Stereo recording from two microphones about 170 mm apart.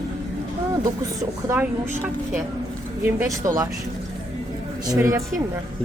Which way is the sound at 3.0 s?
15° right (ahead or behind).